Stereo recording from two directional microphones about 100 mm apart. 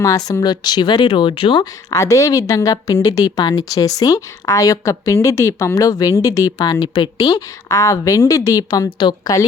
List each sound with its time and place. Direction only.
0.3 s speech: 40° left (ahead or behind)
1.9 s speech: 30° left (ahead or behind); by 7.3 s 55° left (ahead or behind)
7.3 s speech: 40° left (ahead or behind)
9.0 s speech: 50° left (ahead or behind)